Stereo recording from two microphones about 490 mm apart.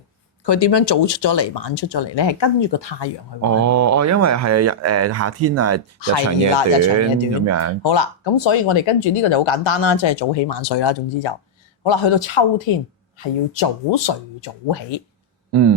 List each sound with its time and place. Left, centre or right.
0.4 s speech: left
3.6 s speech: right
6.0 s speech: left
6.5 s speech: left
7.0 s speech: right
7.9 s speech: left